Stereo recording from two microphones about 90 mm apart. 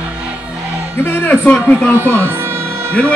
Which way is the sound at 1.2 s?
15° left (ahead or behind).